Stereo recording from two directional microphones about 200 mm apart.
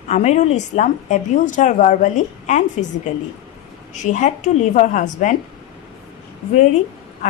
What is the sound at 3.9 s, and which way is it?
A woman's voice, 40° left (ahead or behind).